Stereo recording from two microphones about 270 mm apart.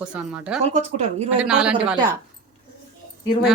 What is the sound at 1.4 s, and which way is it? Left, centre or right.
Speech, centre.